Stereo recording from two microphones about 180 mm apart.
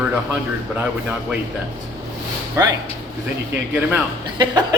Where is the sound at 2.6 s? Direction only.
15° right (ahead or behind).